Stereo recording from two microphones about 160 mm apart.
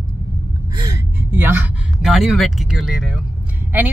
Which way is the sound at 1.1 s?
10° right (ahead or behind).